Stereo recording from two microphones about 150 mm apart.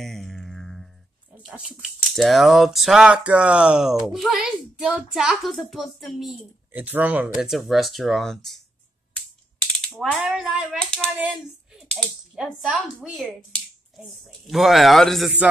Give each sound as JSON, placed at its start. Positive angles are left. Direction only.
{"t": 0.0, "sound": "music", "side_deg": 0}
{"t": 1.4, "sound": "speech", "side_deg": -5}
{"t": 9.8, "sound": "speech", "side_deg": 0}
{"t": 14.5, "sound": "speech", "side_deg": 0}